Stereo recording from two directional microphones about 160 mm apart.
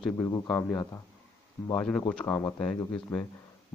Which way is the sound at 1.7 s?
5° left (ahead or behind).